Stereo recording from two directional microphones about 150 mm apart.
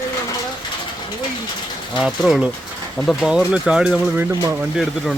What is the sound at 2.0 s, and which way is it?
Speech, centre (ahead or behind).